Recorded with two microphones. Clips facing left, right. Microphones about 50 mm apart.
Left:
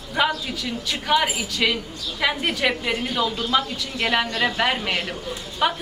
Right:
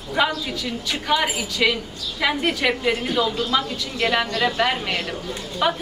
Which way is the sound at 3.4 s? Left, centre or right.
Centre.